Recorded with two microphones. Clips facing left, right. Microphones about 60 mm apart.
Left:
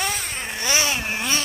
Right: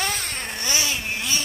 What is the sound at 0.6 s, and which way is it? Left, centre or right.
Vehicle, left.